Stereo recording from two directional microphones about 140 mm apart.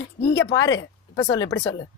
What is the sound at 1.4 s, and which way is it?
Speech, 25° left (ahead or behind).